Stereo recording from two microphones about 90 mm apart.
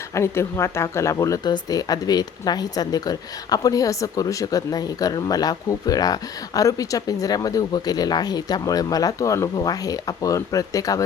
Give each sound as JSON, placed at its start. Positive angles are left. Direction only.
{"t": 0.1, "sound": "speech", "side_deg": 30}
{"t": 1.5, "sound": "speech", "side_deg": 50}